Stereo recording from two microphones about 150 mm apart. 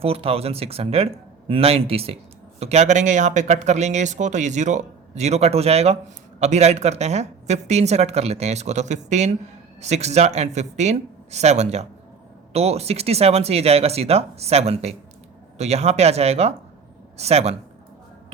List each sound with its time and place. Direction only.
0.0 s speech: 40° right (ahead or behind)